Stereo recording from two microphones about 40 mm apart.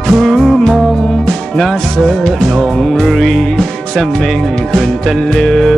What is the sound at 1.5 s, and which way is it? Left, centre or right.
Music, centre.